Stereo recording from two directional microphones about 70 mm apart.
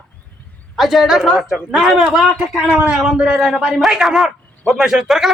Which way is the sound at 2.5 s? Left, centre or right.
Centre.